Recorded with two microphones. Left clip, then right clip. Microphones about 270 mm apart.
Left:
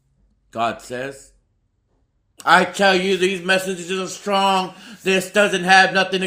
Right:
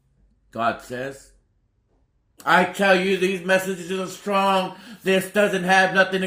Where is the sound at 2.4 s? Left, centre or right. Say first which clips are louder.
Left 3 dB; left.